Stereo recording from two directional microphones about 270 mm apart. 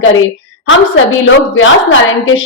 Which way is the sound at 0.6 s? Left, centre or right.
Left.